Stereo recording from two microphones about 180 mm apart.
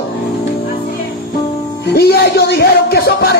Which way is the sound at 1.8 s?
65° left (ahead or behind).